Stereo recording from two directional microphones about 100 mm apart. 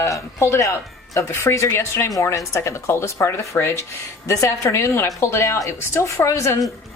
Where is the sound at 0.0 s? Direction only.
30° left (ahead or behind).